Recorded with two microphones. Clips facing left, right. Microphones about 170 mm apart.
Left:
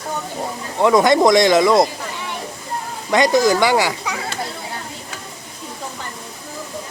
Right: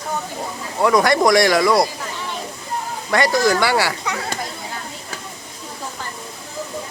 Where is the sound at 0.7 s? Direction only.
20° left (ahead or behind).